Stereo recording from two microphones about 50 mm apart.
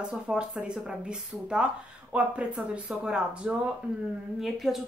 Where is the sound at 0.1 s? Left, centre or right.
Centre.